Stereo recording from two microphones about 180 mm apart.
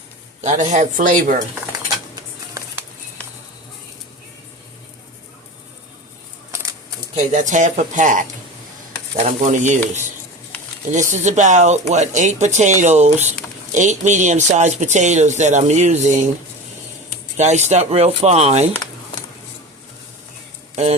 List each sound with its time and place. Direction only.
0.4 s speech: 45° right (ahead or behind)
7.2 s speech: 45° right (ahead or behind)
11.1 s speech: 40° right (ahead or behind)
17.3 s speech: 40° right (ahead or behind)